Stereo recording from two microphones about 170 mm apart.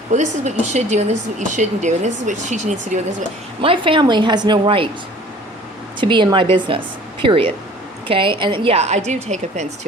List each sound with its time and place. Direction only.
0.1 s a woman's voice: 40° right (ahead or behind)
3.6 s a woman's voice: 30° right (ahead or behind)
6.0 s a woman's voice: 30° right (ahead or behind)